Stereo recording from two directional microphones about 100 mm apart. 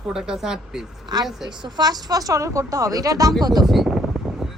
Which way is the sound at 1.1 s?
40° right (ahead or behind).